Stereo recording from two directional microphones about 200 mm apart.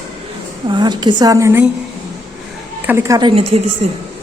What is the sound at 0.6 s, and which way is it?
A woman's voice, 20° right (ahead or behind).